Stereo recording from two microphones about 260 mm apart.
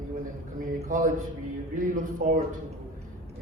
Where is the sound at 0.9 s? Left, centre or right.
Right.